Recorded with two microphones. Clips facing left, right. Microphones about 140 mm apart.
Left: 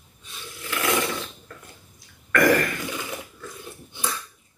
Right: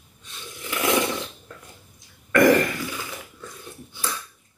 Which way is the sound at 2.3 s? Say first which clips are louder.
Right 3 dB; 25° right (ahead or behind).